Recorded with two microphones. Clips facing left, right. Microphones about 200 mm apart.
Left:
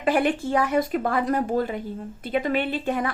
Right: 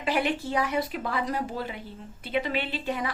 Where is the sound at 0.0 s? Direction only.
50° left (ahead or behind).